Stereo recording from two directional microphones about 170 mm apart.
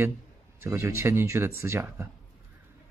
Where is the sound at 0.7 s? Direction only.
15° right (ahead or behind).